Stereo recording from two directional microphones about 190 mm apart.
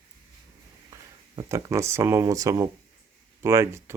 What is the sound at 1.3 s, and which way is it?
Speech, 15° right (ahead or behind).